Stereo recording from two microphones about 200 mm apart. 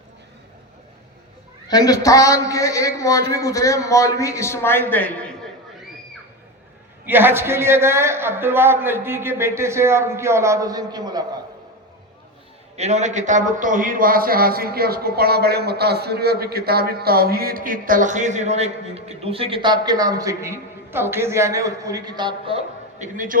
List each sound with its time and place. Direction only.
1.6 s a man's voice: 20° left (ahead or behind)
7.0 s a man's voice: 10° right (ahead or behind)
12.7 s a man's voice: 35° right (ahead or behind)